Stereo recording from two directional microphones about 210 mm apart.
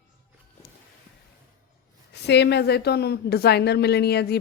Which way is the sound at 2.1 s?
55° left (ahead or behind).